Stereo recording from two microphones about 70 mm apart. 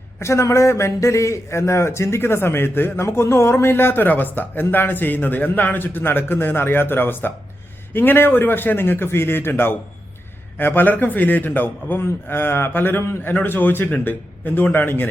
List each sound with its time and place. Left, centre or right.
0.2 s a man's voice: left